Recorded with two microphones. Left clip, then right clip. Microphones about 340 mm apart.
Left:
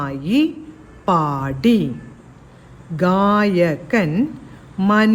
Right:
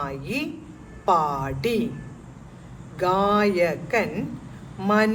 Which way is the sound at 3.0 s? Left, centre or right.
Left.